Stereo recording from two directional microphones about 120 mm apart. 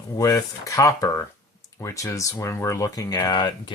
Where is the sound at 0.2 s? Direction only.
30° left (ahead or behind).